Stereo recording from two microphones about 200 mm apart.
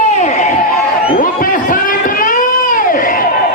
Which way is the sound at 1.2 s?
45° left (ahead or behind).